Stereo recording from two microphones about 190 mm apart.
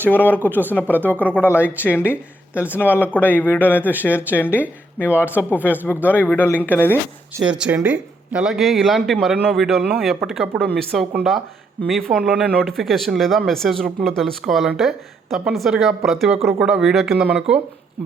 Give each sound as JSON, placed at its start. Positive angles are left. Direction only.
{"t": 0.0, "sound": "a man's voice", "side_deg": 10}
{"t": 2.7, "sound": "a man's voice", "side_deg": 10}
{"t": 7.6, "sound": "speech", "side_deg": -10}